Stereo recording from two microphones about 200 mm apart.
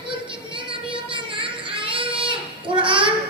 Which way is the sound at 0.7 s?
25° right (ahead or behind).